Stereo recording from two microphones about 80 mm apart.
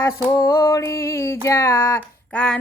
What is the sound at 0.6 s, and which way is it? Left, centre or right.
Music, left.